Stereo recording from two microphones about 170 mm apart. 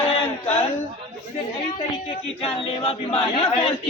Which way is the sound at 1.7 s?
30° left (ahead or behind).